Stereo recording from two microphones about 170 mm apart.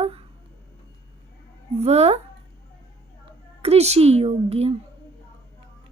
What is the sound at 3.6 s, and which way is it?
A woman's voice, 40° right (ahead or behind).